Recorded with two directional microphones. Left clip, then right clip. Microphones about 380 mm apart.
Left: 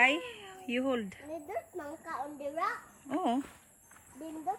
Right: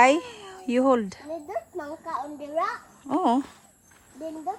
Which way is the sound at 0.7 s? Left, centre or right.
Centre.